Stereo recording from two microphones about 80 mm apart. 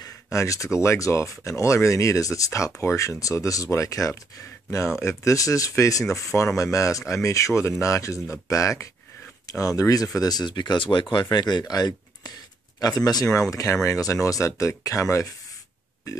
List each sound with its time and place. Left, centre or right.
0.0 s a sound: left
0.7 s speech: left
11.2 s speech: left